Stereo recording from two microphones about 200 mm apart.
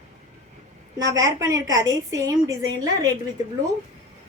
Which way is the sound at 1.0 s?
15° right (ahead or behind).